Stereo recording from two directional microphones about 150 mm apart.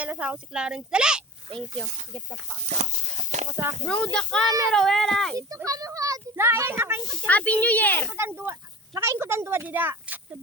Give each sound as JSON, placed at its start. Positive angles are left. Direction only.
{"t": 0.0, "sound": "speech", "side_deg": -10}
{"t": 2.6, "sound": "a sound", "side_deg": -50}
{"t": 3.8, "sound": "a child's voice", "side_deg": 5}
{"t": 5.4, "sound": "a child's voice", "side_deg": -25}
{"t": 7.3, "sound": "a child's voice", "side_deg": 10}
{"t": 8.1, "sound": "a child's voice", "side_deg": -15}